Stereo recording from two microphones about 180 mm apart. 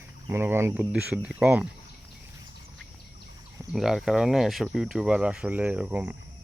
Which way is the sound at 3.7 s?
Centre (ahead or behind).